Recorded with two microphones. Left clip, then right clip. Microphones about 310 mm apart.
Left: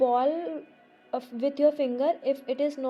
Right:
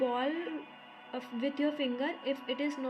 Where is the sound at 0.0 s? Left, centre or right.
Left.